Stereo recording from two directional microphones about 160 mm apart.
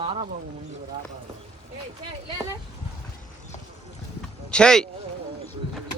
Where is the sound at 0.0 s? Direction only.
35° right (ahead or behind).